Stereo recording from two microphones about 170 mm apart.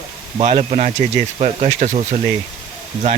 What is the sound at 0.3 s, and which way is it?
Speech, 40° right (ahead or behind).